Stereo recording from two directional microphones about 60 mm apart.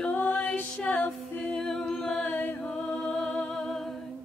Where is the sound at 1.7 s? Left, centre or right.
Centre.